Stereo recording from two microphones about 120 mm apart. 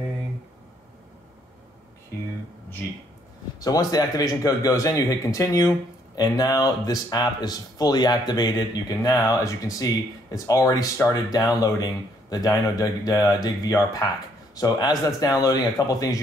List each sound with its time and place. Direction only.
3.5 s a man's voice: 30° left (ahead or behind)